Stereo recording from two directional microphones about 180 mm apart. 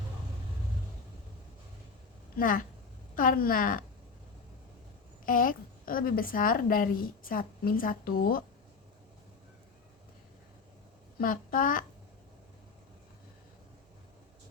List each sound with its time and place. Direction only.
2.4 s a woman's voice: 50° left (ahead or behind)
5.2 s a woman's voice: 50° left (ahead or behind)
11.2 s a woman's voice: 50° left (ahead or behind)